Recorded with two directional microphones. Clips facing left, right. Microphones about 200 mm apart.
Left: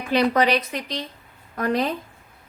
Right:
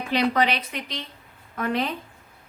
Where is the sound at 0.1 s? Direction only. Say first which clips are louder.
Left 4 dB; 45° left (ahead or behind).